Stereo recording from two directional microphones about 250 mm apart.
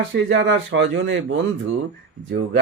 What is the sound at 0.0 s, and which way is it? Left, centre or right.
Speech, right.